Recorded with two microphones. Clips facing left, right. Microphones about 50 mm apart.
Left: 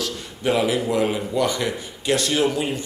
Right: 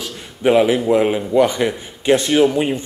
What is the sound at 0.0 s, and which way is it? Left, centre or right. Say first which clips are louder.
A man's voice: right 6 dB; right.